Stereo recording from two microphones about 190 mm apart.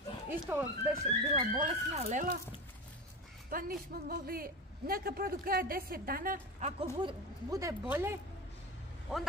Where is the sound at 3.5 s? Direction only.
50° right (ahead or behind).